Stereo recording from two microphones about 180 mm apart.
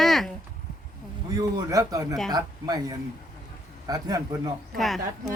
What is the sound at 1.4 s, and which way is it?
Speech, 20° right (ahead or behind).